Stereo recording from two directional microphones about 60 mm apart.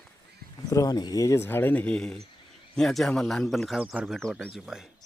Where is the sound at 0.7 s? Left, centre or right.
Left.